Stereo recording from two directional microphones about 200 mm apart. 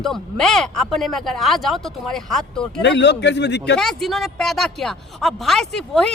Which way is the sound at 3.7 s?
Centre (ahead or behind).